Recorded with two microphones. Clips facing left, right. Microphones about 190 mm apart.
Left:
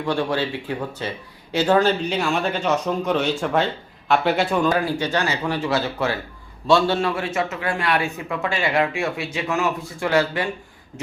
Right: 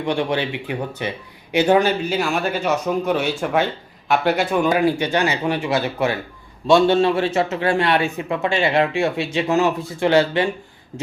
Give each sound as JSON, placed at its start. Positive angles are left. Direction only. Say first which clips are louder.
{"t": 0.0, "sound": "speech", "louder": "right 1 dB", "side_deg": -20}
{"t": 4.6, "sound": "speech", "louder": "right 3 dB", "side_deg": -15}